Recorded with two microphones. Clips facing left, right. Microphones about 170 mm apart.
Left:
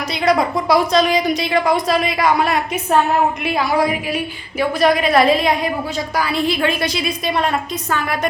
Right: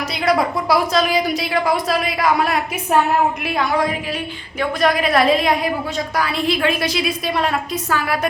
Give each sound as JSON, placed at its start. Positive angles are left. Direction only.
{"t": 0.1, "sound": "a woman's voice", "side_deg": 0}